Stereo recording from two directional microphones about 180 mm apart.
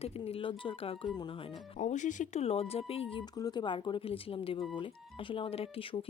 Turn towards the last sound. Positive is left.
turn(degrees=30)  # may be behind; listen again after turning